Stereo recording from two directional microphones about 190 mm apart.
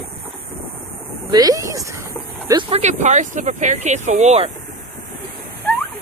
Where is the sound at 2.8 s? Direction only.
40° right (ahead or behind).